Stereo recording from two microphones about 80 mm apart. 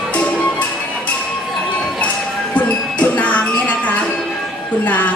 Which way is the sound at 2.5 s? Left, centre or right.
Centre.